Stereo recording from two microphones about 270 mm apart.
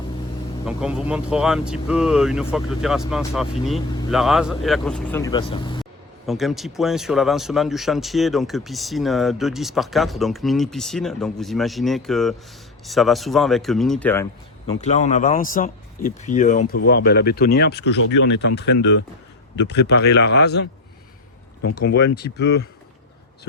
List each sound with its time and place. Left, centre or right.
0.6 s speech: centre
5.8 s speech: centre
14.7 s speech: left
21.8 s speech: left